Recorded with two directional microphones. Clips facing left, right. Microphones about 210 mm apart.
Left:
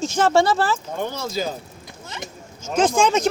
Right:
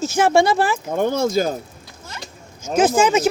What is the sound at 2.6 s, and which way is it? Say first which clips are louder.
Speech: right 2 dB; 5° right (ahead or behind).